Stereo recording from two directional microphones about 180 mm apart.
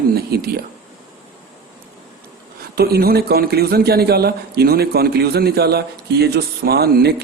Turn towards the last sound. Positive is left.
turn(degrees=-60)  # may be behind; listen again after turning